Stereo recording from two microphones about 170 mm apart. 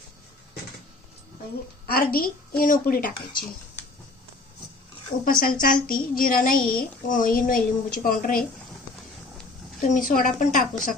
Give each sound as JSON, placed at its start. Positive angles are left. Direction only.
{"t": 1.9, "sound": "a woman's voice", "side_deg": 60}
{"t": 5.2, "sound": "a woman's voice", "side_deg": 55}
{"t": 9.8, "sound": "speech", "side_deg": 50}